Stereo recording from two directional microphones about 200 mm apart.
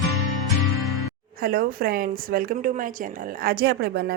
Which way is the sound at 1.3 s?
50° right (ahead or behind).